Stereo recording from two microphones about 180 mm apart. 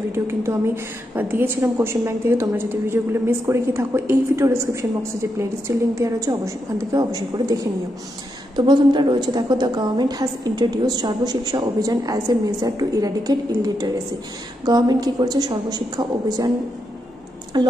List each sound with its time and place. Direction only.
0.1 s a woman's voice: 15° right (ahead or behind)
17.5 s a woman's voice: 25° right (ahead or behind)